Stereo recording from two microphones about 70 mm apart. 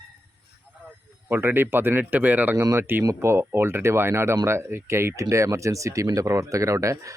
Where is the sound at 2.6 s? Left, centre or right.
Right.